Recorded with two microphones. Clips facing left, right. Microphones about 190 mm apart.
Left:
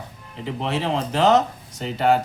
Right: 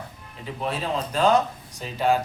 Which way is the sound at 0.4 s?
80° left.